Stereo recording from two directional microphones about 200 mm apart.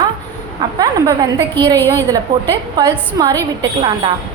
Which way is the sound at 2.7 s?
20° right (ahead or behind).